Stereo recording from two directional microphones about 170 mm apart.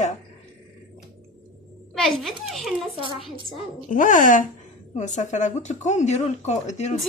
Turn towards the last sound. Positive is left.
turn(degrees=40)  # may be behind; listen again after turning